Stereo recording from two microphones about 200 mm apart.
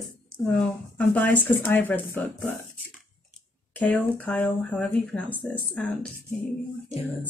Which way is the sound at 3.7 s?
5° left (ahead or behind).